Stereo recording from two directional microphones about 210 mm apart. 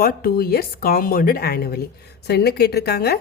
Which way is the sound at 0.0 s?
45° left (ahead or behind).